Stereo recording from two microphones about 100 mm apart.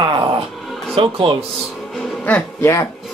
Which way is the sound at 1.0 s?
65° right (ahead or behind).